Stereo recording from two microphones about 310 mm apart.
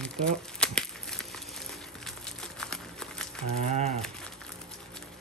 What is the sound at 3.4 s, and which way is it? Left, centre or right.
Cattle, right.